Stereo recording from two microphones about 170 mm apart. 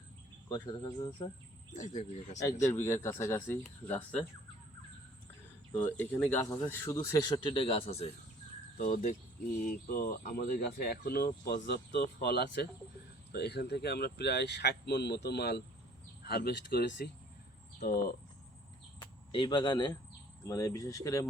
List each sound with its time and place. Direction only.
0.5 s speech: 20° left (ahead or behind)
1.7 s speech: 45° left (ahead or behind)
2.4 s speech: 15° left (ahead or behind)
5.7 s speech: 10° left (ahead or behind); by 8.1 s 35° left (ahead or behind)
8.8 s speech: 50° left (ahead or behind); by 16.8 s 65° left (ahead or behind)
18.9 s speech: 30° left (ahead or behind)